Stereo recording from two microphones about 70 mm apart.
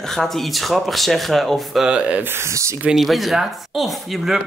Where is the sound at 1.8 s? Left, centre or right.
Centre.